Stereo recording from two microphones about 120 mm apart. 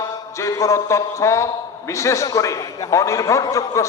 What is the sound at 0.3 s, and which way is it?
A man's voice, 25° left (ahead or behind).